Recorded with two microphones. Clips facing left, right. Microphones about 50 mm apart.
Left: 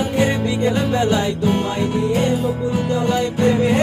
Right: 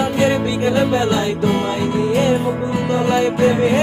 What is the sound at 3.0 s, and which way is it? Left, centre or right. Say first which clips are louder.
Music: right 3 dB; right.